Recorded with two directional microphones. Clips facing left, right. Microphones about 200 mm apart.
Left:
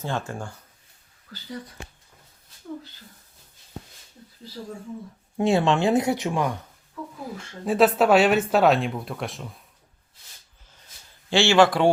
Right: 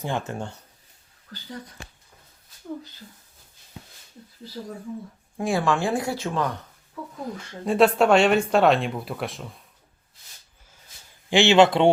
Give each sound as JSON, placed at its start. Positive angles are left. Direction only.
{"t": 0.0, "sound": "speech", "side_deg": -15}
{"t": 3.8, "sound": "a sound", "side_deg": 45}
{"t": 5.4, "sound": "speech", "side_deg": 25}
{"t": 7.3, "sound": "speech", "side_deg": 0}
{"t": 11.3, "sound": "speech", "side_deg": -20}